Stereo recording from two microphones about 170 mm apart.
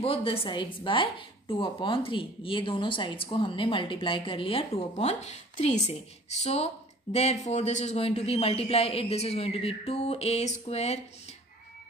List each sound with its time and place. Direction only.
0.0 s speech: 35° left (ahead or behind)